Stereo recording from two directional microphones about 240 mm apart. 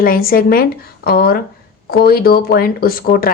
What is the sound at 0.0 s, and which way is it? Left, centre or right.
Speech, left.